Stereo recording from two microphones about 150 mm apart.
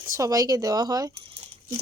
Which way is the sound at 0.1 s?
20° right (ahead or behind).